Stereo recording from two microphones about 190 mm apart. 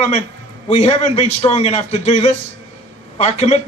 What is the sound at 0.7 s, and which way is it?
A man's voice, 35° left (ahead or behind).